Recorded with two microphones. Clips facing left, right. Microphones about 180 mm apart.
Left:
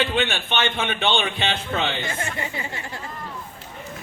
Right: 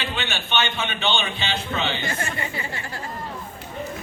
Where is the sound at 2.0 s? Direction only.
20° left (ahead or behind).